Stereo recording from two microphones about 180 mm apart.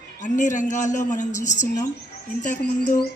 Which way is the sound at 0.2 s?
45° left (ahead or behind).